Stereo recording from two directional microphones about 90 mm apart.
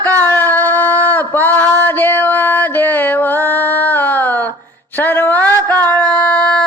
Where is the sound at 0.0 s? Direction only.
20° left (ahead or behind).